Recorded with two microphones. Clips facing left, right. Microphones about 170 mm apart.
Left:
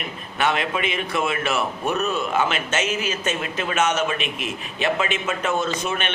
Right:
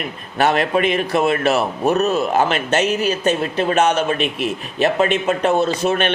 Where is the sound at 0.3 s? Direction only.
40° right (ahead or behind).